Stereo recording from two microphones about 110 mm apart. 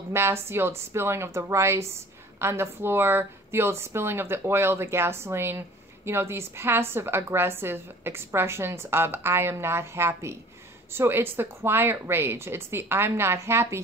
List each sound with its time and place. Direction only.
0.1 s a woman's voice: 20° right (ahead or behind)